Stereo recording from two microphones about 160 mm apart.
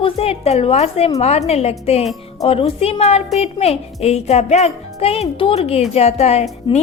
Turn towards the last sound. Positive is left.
turn(degrees=30)  # may be behind; listen again after turning